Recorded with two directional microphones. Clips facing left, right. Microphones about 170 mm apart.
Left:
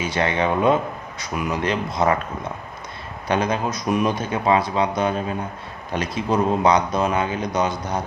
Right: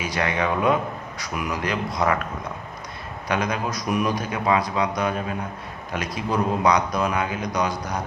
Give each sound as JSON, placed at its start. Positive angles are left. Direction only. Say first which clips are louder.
{"t": 0.0, "sound": "speech", "louder": "left 3 dB", "side_deg": 25}
{"t": 3.2, "sound": "speech", "louder": "left 3 dB", "side_deg": 30}